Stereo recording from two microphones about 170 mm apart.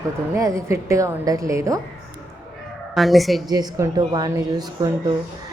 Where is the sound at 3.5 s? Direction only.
25° right (ahead or behind).